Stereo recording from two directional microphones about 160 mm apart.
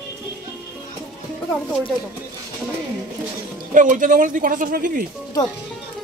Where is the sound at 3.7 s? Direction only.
55° right (ahead or behind).